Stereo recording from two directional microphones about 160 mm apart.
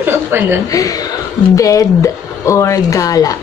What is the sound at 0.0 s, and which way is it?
Chuckle, 15° right (ahead or behind).